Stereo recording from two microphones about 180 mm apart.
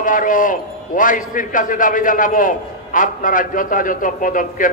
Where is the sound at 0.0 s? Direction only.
50° left (ahead or behind).